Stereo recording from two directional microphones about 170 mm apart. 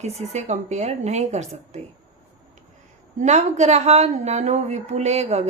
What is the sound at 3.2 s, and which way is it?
Speech, 45° right (ahead or behind).